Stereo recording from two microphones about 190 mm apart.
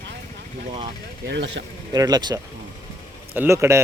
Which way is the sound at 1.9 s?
20° right (ahead or behind).